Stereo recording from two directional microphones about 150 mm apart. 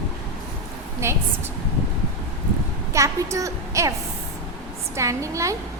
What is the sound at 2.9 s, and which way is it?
A woman's voice, 20° right (ahead or behind).